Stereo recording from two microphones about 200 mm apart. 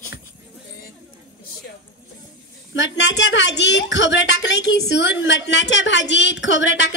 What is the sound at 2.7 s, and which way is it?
A woman's voice, 65° left (ahead or behind).